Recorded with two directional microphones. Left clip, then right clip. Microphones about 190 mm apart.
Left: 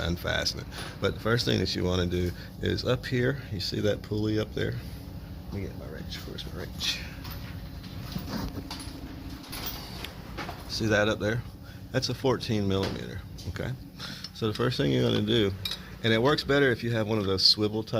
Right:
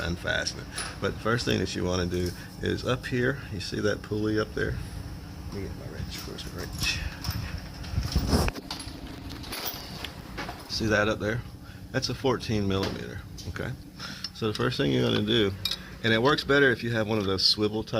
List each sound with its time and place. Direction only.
0.0 s speech: 15° left (ahead or behind)
10.8 s speech: 15° left (ahead or behind)